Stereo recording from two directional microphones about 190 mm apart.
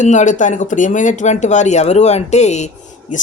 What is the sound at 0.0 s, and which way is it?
Speech, 40° left (ahead or behind).